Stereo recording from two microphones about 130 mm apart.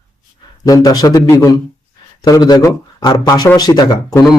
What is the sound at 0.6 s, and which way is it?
A man's voice, 30° left (ahead or behind).